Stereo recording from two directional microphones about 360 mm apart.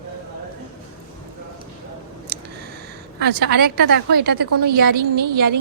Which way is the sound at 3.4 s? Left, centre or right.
Right.